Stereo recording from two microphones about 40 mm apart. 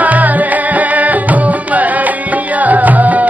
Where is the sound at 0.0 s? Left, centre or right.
Right.